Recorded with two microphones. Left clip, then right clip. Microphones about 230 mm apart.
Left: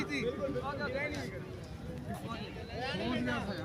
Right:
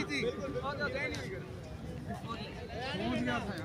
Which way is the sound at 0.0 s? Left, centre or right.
Right.